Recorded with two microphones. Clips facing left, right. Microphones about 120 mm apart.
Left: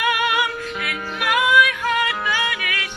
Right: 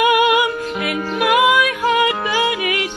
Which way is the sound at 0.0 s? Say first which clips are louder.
Right 7 dB; 15° right (ahead or behind).